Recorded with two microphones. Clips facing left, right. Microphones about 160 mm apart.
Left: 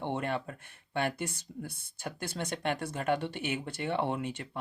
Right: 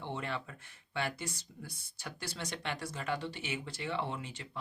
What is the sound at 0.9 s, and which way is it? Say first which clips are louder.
Speech: left 5 dB; 55° left (ahead or behind).